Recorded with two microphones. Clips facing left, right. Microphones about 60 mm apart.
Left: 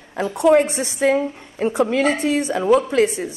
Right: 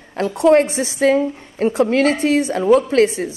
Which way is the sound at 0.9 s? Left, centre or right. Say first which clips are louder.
Right 3 dB; right.